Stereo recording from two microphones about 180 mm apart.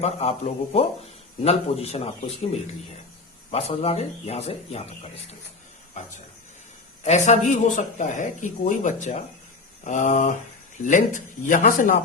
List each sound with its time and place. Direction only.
0.0 s speech: 35° left (ahead or behind)
7.0 s a man's voice: 40° left (ahead or behind)